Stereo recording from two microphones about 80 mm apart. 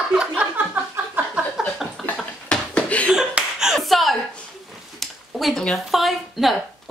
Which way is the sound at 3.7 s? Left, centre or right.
Centre.